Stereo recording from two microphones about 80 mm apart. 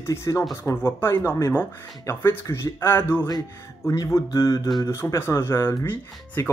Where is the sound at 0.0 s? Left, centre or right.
Left.